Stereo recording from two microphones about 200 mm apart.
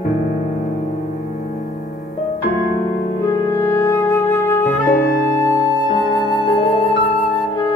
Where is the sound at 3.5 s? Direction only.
15° left (ahead or behind).